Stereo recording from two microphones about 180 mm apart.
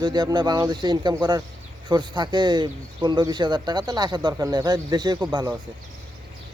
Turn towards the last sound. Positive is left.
turn(degrees=-15)  # may be behind; listen again after turning